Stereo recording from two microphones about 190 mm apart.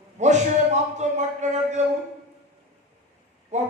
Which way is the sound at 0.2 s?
40° right (ahead or behind).